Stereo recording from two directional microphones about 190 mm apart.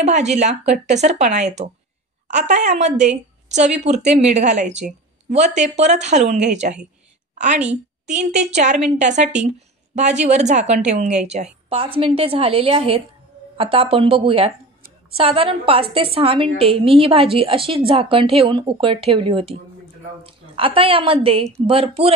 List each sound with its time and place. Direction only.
0.0 s a woman's voice: 35° right (ahead or behind)